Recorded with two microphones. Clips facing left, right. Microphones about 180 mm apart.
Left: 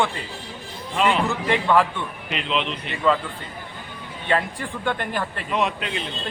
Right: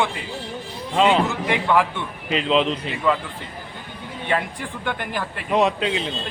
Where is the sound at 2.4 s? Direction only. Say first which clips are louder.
Right 6 dB; 35° right (ahead or behind).